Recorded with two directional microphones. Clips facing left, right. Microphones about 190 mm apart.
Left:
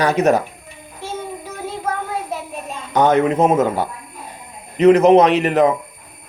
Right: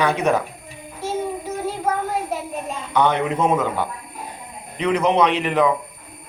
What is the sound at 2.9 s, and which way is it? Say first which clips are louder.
Speech: left 5 dB; 45° left (ahead or behind).